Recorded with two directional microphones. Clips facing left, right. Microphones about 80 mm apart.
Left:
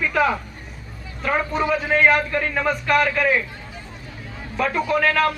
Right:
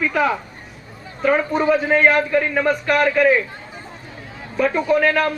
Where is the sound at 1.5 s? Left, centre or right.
Right.